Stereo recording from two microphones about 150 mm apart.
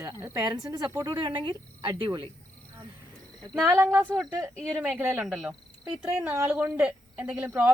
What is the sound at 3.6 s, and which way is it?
A woman's voice, 15° right (ahead or behind).